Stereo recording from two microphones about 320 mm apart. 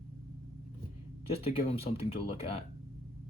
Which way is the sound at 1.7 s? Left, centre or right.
Centre.